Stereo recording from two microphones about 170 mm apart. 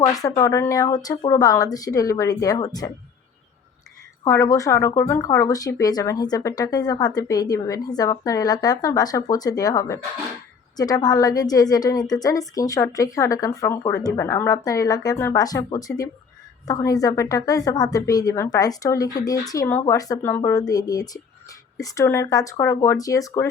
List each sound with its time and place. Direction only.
0.0 s speech: 20° left (ahead or behind)
4.2 s speech: 20° left (ahead or behind)